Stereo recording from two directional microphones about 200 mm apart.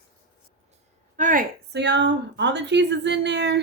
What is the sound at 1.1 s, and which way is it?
Speech, 40° right (ahead or behind).